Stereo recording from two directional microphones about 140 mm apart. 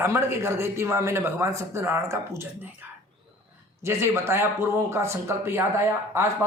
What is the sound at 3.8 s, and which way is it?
A man's voice, 20° right (ahead or behind).